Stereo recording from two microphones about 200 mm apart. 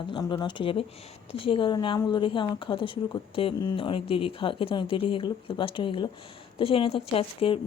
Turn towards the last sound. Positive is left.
turn(degrees=30)  # may be behind; listen again after turning